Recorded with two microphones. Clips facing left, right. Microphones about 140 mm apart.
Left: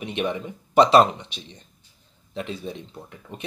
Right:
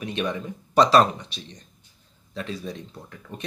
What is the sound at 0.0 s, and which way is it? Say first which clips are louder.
Speech: left 1 dB; 20° left (ahead or behind).